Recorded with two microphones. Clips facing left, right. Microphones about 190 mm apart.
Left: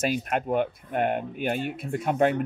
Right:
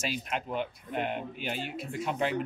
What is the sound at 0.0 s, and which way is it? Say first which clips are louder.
Speech: left 8 dB; 50° left (ahead or behind).